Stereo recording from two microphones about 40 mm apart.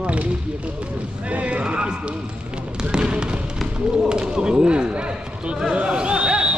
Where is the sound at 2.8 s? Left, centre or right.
Right.